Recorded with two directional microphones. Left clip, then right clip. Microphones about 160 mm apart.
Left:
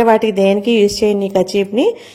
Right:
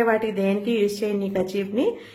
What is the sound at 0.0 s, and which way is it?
A woman's voice, 40° left (ahead or behind).